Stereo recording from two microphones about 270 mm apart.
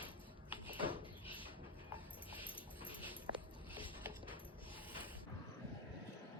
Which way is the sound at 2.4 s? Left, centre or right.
Centre.